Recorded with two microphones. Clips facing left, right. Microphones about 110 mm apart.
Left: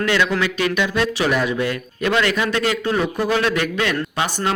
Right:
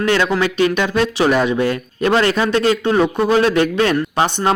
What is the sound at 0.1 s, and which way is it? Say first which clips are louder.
Speech: right 5 dB; 35° right (ahead or behind).